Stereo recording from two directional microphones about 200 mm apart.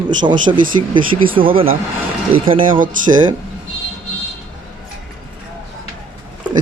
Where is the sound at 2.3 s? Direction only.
25° right (ahead or behind).